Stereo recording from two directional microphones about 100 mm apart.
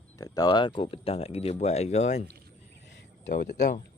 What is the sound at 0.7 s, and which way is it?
Speech, 70° left (ahead or behind).